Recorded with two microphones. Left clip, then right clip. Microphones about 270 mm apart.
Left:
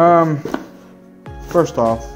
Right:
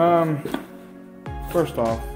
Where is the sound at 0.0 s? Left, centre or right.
Left.